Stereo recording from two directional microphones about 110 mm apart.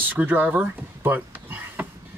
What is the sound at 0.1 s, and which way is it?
Speech, 15° right (ahead or behind).